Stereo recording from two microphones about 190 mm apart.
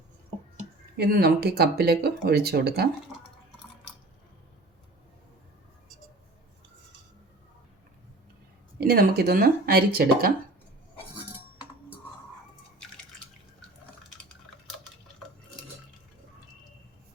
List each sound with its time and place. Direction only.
0.9 s speech: 60° right (ahead or behind)
8.8 s speech: 55° right (ahead or behind)